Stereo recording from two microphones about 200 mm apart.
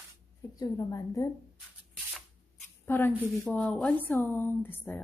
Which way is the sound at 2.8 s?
10° left (ahead or behind).